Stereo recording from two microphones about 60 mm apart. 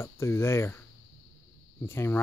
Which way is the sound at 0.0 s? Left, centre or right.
Left.